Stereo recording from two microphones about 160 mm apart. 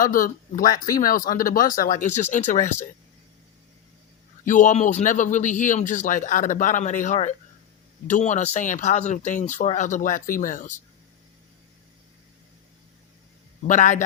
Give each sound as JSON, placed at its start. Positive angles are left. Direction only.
{"t": 0.0, "sound": "speech", "side_deg": 60}
{"t": 4.4, "sound": "speech", "side_deg": 55}
{"t": 13.7, "sound": "speech", "side_deg": 50}